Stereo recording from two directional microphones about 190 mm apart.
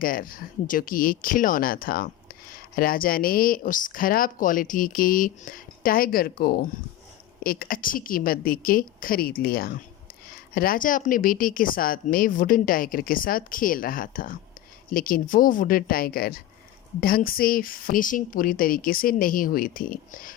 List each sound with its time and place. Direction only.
0.0 s speech: 50° left (ahead or behind)